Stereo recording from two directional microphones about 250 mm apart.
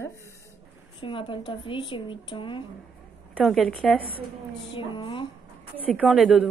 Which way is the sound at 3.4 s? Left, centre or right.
Centre.